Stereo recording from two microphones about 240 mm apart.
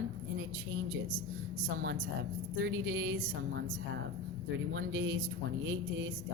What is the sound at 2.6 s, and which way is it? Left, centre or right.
Speech, right.